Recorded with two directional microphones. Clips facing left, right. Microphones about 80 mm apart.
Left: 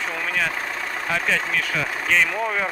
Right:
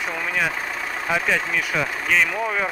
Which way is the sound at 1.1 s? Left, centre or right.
Centre.